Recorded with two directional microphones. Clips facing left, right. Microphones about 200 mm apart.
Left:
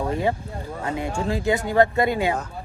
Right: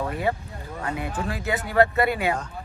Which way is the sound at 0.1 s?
25° left (ahead or behind).